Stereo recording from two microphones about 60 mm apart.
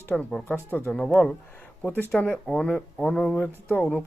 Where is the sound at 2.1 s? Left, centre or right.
Left.